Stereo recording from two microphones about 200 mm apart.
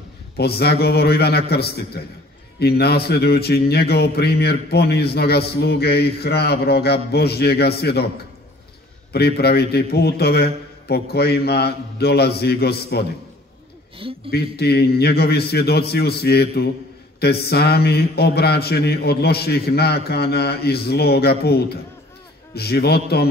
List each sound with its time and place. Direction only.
0.4 s speech: 55° left (ahead or behind)
9.1 s speech: 55° left (ahead or behind)
13.9 s a man's voice: 25° right (ahead or behind)
14.3 s speech: 55° left (ahead or behind)